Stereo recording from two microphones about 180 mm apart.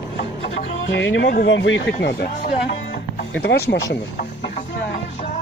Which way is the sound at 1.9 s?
60° left (ahead or behind).